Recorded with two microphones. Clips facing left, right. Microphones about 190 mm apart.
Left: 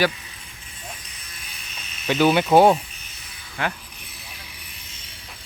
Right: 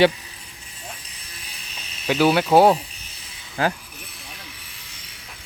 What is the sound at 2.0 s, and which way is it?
Speech, 5° right (ahead or behind).